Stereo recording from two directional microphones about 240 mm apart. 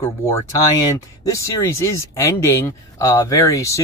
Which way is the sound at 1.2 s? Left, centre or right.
Centre.